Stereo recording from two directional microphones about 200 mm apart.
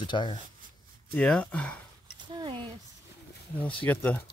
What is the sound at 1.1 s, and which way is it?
Speech, 5° left (ahead or behind).